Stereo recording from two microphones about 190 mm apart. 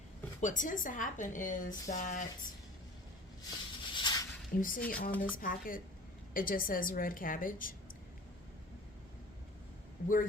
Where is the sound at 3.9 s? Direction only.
20° left (ahead or behind).